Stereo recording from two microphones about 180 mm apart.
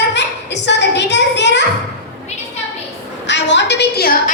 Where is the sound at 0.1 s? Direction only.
75° left (ahead or behind).